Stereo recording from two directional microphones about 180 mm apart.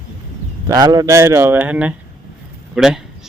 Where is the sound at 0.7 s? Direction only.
20° right (ahead or behind).